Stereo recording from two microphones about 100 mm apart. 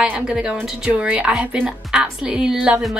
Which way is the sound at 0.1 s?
10° right (ahead or behind).